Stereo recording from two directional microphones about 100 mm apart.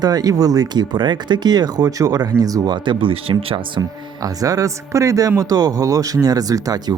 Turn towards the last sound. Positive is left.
turn(degrees=-40)  # may be behind; listen again after turning